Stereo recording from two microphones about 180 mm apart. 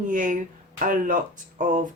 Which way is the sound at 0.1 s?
45° right (ahead or behind).